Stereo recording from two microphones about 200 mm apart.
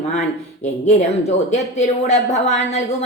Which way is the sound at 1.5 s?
35° left (ahead or behind).